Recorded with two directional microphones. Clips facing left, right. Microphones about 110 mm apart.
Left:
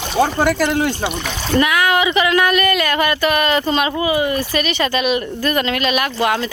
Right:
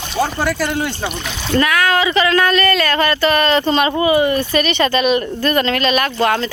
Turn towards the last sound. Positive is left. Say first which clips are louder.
# right 2 dB
turn(degrees=5)  # may be behind; listen again after turning